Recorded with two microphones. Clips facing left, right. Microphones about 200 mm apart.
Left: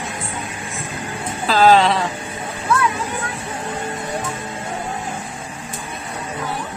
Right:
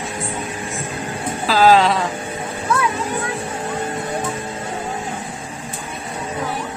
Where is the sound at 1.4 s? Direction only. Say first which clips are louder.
Even; centre (ahead or behind).